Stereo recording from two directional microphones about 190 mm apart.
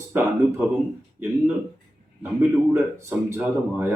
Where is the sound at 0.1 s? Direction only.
10° right (ahead or behind).